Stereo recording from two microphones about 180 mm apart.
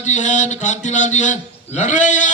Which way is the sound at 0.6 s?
45° left (ahead or behind).